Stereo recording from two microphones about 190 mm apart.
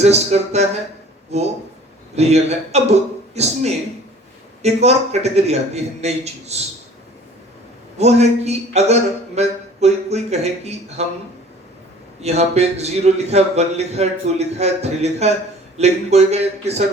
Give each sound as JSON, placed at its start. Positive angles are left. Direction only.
{"t": 0.0, "sound": "a man's voice", "side_deg": -35}
{"t": 7.9, "sound": "a man's voice", "side_deg": -35}
{"t": 12.2, "sound": "a man's voice", "side_deg": -35}